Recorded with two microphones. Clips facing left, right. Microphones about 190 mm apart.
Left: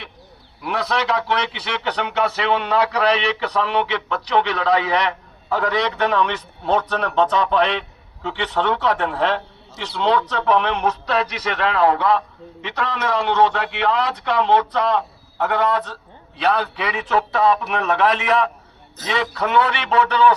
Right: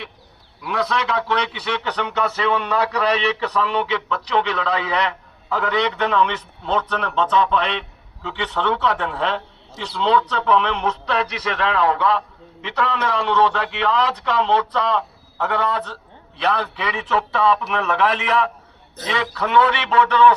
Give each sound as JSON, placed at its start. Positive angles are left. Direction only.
{"t": 0.6, "sound": "a man's voice", "side_deg": 35}
{"t": 16.5, "sound": "a man's voice", "side_deg": 35}